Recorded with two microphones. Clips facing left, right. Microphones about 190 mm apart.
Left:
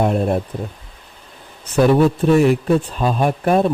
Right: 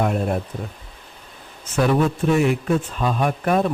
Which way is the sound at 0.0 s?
30° left (ahead or behind).